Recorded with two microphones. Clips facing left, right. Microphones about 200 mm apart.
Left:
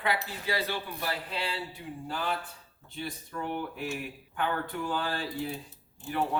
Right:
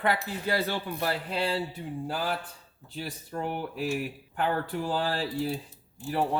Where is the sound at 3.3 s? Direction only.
40° right (ahead or behind).